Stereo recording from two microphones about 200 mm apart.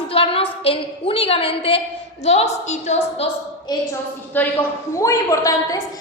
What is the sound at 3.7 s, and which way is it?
Speech, 20° left (ahead or behind).